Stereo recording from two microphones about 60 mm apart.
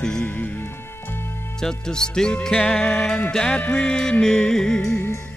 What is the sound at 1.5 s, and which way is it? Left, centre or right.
Music, centre.